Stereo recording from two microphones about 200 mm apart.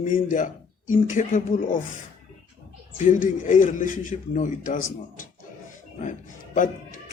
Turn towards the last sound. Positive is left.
turn(degrees=40)  # may be behind; listen again after turning